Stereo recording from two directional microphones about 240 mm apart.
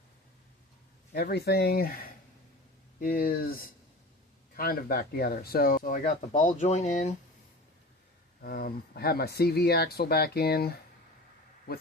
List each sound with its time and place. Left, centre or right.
1.1 s speech: left
8.4 s speech: left